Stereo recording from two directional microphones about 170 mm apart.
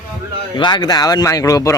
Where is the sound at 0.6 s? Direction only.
25° left (ahead or behind).